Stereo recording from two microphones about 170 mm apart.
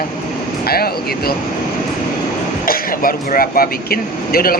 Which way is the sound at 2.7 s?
60° left (ahead or behind).